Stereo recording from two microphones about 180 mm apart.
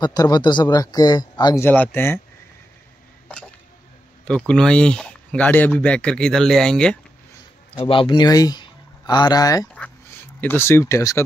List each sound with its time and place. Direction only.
0.0 s speech: 20° left (ahead or behind)
4.5 s speech: 5° left (ahead or behind)
7.8 s speech: 30° left (ahead or behind)